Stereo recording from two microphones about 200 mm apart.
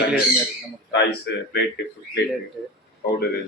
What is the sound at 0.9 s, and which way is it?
Speech, 55° left (ahead or behind).